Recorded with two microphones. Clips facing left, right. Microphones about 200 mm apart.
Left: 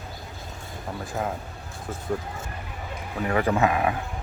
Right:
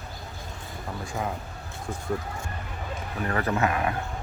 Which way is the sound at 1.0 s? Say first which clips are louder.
Left 2 dB; centre (ahead or behind).